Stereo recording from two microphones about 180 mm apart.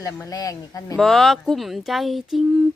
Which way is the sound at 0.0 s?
20° left (ahead or behind).